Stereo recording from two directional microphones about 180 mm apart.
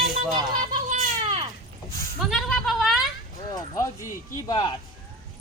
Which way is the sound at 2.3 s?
Centre (ahead or behind).